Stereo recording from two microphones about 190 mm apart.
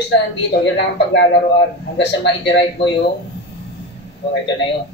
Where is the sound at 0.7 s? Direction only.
70° left (ahead or behind).